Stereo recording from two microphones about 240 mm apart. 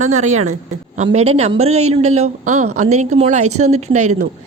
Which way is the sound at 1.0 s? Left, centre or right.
Right.